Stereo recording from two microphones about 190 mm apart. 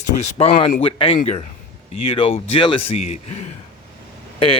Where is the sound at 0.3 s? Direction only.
30° left (ahead or behind).